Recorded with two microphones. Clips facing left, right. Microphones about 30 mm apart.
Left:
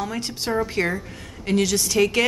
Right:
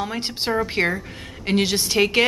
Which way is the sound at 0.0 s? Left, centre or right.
Right.